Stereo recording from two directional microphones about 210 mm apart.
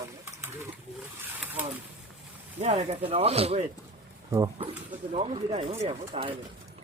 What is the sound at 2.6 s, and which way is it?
A man's voice, 30° right (ahead or behind).